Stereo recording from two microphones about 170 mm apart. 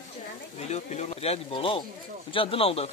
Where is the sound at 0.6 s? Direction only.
40° left (ahead or behind).